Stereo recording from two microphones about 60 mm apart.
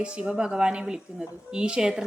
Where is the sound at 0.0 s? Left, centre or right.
Centre.